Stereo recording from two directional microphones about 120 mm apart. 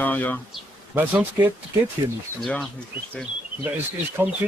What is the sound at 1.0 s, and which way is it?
Speech, 15° right (ahead or behind).